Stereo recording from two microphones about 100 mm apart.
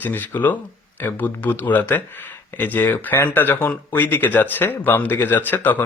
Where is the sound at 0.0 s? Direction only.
20° left (ahead or behind).